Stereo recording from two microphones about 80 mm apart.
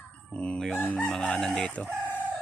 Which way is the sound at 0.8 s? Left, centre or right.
Left.